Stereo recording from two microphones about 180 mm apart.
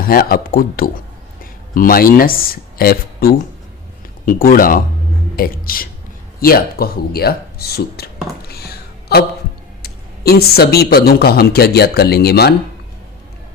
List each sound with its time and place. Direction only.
0.0 s speech: 55° left (ahead or behind)